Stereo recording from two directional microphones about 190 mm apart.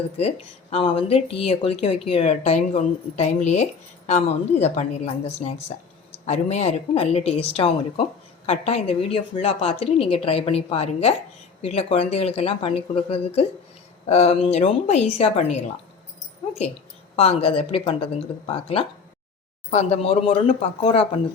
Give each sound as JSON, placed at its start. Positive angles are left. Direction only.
{"t": 0.2, "sound": "speech", "side_deg": 30}
{"t": 17.2, "sound": "speech", "side_deg": 30}